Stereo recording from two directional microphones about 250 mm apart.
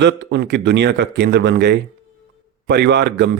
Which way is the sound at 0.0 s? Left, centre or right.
Right.